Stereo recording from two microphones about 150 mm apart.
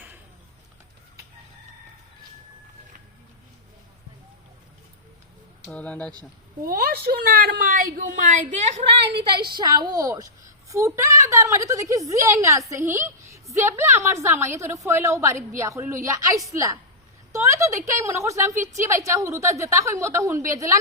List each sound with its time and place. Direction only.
5.6 s speech: 10° left (ahead or behind)
6.6 s a woman's voice: 85° right; by 9.0 s 45° right (ahead or behind)
9.6 s a woman's voice: 25° right (ahead or behind)